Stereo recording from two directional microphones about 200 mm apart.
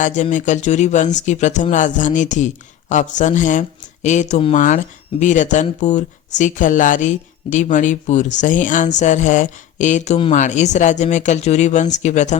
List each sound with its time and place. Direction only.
0.0 s speech: 40° left (ahead or behind)